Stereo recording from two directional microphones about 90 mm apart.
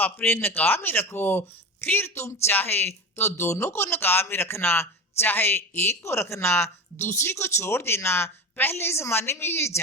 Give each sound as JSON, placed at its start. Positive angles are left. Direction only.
{"t": 0.0, "sound": "speech", "side_deg": 25}